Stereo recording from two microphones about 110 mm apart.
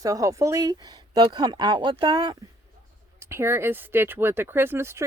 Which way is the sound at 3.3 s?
20° right (ahead or behind).